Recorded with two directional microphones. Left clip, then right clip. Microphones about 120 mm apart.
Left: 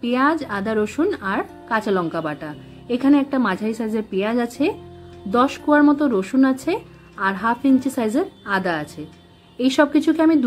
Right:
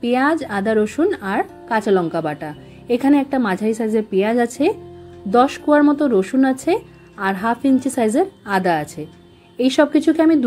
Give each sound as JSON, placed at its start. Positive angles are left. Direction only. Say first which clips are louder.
{"t": 0.0, "sound": "speech", "louder": "right 2 dB", "side_deg": -25}